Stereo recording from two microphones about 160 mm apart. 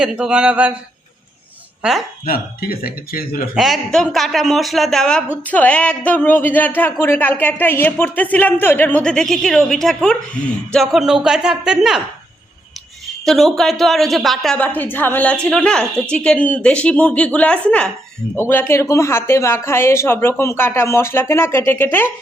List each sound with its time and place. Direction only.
0.0 s speech: 5° right (ahead or behind)
2.2 s speech: 65° left (ahead or behind)
3.5 s speech: centre (ahead or behind)
13.2 s speech: centre (ahead or behind)